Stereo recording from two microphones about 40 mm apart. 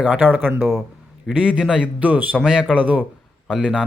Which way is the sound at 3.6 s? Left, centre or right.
Right.